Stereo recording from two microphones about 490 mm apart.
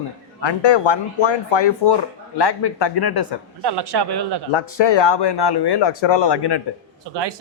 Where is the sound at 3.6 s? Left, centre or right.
Right.